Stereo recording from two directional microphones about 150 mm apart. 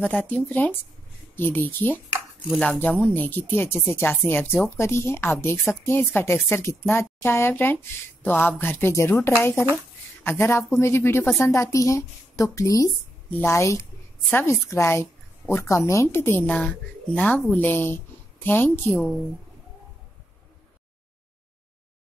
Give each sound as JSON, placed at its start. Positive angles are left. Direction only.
{"t": 0.0, "sound": "a woman's voice", "side_deg": 10}